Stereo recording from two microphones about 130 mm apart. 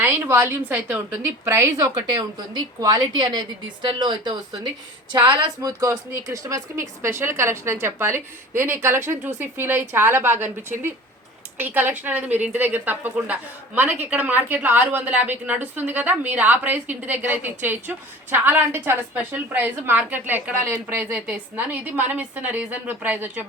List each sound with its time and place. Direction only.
0.0 s a woman's voice: 15° right (ahead or behind)